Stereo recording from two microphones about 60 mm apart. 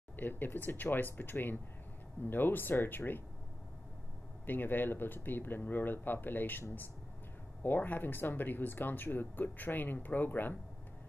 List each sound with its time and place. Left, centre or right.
0.1 s speech: left
4.5 s speech: left
7.6 s speech: left